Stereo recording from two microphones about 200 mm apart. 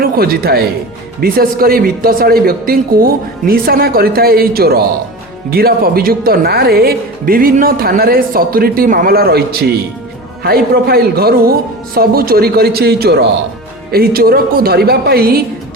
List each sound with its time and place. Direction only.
0.0 s speech: 50° right (ahead or behind)